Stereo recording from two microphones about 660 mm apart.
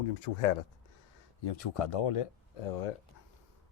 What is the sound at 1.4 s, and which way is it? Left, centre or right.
Speech, left.